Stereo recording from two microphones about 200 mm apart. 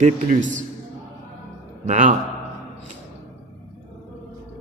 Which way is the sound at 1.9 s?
40° right (ahead or behind).